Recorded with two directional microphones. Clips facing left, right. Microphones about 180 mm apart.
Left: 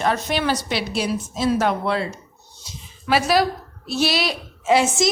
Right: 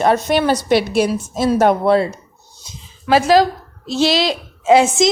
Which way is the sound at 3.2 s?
90° right.